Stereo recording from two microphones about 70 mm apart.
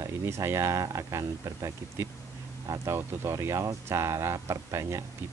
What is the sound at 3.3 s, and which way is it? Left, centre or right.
Speech, right.